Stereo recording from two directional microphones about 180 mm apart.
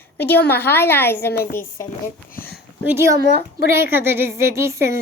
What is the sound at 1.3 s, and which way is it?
Speech, 55° left (ahead or behind).